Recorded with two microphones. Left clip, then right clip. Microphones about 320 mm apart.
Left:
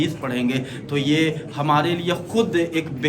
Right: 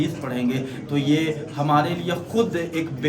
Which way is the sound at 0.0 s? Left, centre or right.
Centre.